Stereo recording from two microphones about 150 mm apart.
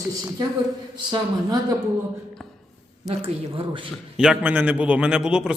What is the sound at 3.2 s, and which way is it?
Speech, 35° right (ahead or behind).